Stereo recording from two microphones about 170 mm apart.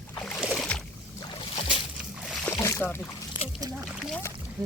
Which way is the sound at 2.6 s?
15° left (ahead or behind).